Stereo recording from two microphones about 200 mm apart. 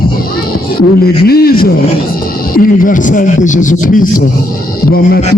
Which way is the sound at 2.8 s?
40° left (ahead or behind).